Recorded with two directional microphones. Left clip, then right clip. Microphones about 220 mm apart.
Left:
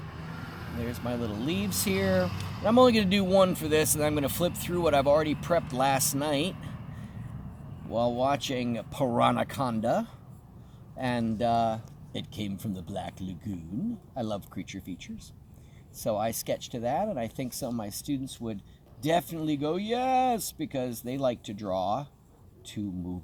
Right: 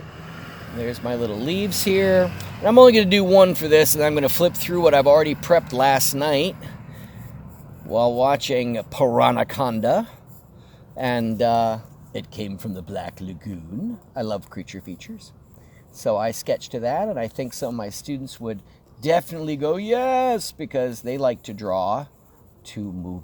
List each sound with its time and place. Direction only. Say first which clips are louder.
1.0 s speech: right 7 dB; 35° right (ahead or behind)
7.9 s speech: right 9 dB; 40° right (ahead or behind)
16.0 s speech: right 8 dB; 30° right (ahead or behind)